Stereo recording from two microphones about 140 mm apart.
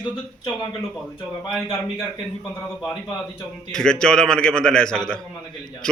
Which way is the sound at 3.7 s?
5° left (ahead or behind).